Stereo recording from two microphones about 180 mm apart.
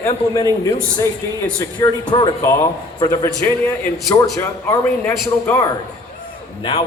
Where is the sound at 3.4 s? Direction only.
10° left (ahead or behind).